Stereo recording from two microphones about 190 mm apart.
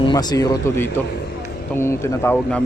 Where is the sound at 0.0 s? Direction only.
20° left (ahead or behind).